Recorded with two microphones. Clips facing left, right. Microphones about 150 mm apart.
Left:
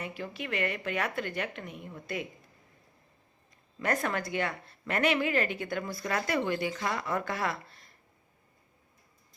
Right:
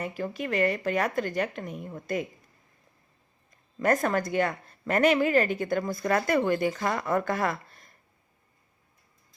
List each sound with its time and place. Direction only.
0.0 s a woman's voice: 45° right (ahead or behind)
3.8 s a woman's voice: 45° right (ahead or behind)